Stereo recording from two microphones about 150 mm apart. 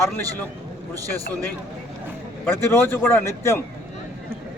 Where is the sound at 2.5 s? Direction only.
15° left (ahead or behind).